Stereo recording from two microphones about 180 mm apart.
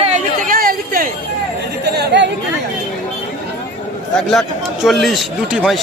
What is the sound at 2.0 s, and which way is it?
Speech, 70° right (ahead or behind).